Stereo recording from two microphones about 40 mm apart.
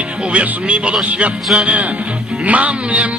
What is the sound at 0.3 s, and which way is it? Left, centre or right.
Music, right.